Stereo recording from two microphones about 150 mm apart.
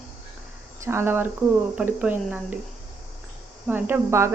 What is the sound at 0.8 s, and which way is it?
Speech, 15° right (ahead or behind).